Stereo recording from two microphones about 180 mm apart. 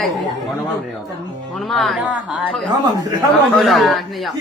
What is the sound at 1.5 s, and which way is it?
Speech, centre (ahead or behind).